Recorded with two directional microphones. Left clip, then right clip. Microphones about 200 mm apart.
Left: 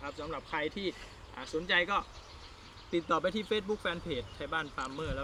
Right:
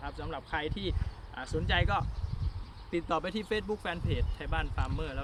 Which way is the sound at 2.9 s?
25° right (ahead or behind).